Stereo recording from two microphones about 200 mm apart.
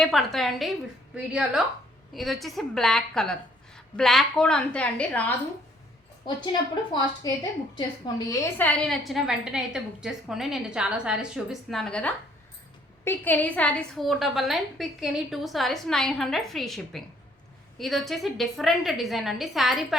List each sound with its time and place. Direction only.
0.0 s a woman's voice: centre (ahead or behind)
7.2 s a woman's voice: 20° left (ahead or behind); by 20.0 s centre (ahead or behind)